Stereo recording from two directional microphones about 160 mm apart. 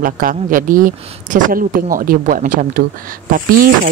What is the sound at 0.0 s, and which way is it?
Speech, 60° right (ahead or behind).